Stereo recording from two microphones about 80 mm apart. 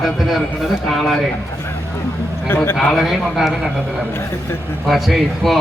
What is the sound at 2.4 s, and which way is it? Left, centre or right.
Speech, left.